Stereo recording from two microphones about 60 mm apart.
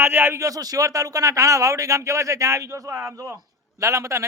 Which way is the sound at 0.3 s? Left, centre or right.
Right.